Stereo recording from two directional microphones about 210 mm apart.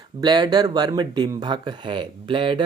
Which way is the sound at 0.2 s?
20° right (ahead or behind).